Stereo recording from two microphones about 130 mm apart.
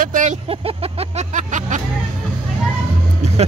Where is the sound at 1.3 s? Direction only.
70° right (ahead or behind).